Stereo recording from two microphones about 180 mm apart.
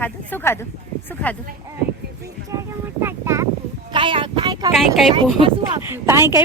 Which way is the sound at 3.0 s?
15° right (ahead or behind).